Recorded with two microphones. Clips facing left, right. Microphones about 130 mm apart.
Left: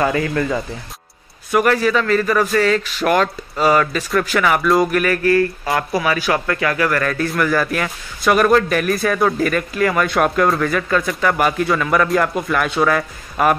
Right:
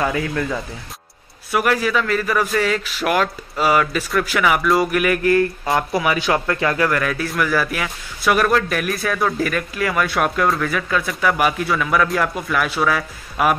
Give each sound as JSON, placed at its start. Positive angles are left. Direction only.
{"t": 0.0, "sound": "a man's voice", "side_deg": 0}
{"t": 7.0, "sound": "a man's voice", "side_deg": -5}